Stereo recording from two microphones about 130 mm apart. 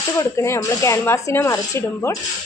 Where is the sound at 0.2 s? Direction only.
20° left (ahead or behind).